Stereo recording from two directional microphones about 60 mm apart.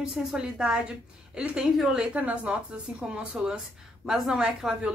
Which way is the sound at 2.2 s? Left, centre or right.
Right.